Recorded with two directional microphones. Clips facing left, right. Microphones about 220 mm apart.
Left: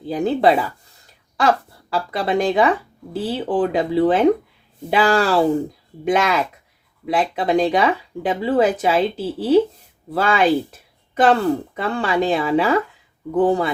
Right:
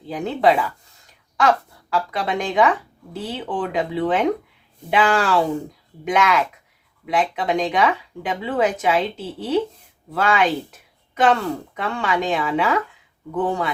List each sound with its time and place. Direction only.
0.0 s speech: 35° left (ahead or behind)